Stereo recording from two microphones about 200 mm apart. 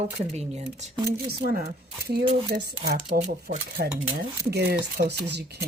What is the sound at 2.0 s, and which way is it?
Speech, 50° right (ahead or behind).